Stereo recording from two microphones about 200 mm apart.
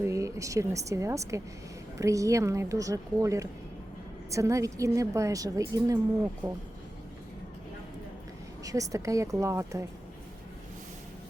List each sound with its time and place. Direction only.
0.0 s a woman's voice: 15° right (ahead or behind)
8.6 s a woman's voice: 15° right (ahead or behind)